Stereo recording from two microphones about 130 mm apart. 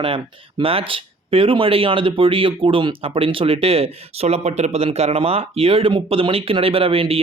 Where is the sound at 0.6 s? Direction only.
45° right (ahead or behind).